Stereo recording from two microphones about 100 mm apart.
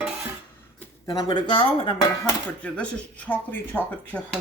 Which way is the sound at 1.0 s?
40° left (ahead or behind).